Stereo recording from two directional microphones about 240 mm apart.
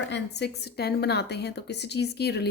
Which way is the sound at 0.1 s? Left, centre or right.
Left.